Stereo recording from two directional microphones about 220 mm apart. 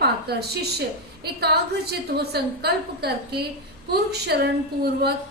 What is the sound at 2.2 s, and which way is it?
A woman's voice, 45° right (ahead or behind).